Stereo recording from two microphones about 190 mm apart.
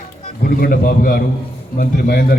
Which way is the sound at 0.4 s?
50° left (ahead or behind).